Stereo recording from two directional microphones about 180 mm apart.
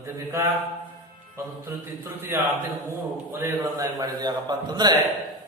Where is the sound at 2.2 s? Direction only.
10° right (ahead or behind).